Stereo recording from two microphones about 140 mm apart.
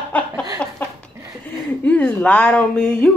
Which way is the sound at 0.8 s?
10° left (ahead or behind).